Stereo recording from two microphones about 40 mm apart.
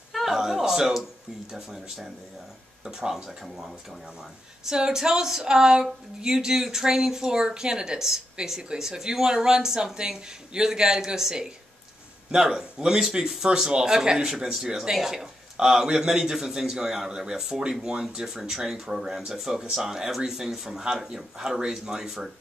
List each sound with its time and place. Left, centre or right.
0.1 s a sound: centre
1.5 s speech: centre
4.6 s speech: centre